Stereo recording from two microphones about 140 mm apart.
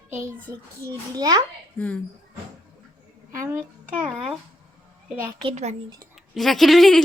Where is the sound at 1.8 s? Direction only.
10° left (ahead or behind).